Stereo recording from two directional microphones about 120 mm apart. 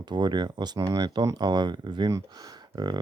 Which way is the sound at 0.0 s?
35° right (ahead or behind).